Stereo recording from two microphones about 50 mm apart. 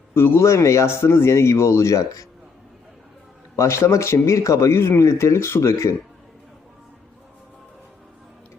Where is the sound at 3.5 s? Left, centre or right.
Left.